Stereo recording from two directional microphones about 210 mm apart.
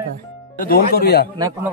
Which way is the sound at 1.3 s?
15° right (ahead or behind).